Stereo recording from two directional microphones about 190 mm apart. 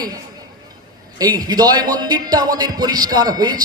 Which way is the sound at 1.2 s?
20° right (ahead or behind).